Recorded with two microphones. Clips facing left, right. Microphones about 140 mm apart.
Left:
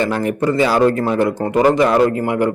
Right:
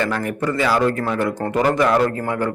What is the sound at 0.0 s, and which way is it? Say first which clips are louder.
A man's voice: left 4 dB; 25° left (ahead or behind).